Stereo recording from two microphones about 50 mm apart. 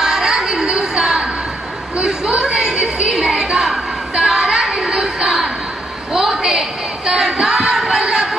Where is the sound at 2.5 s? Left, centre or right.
Centre.